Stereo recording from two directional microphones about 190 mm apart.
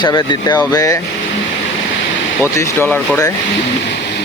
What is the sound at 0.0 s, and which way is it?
Speech, 20° left (ahead or behind).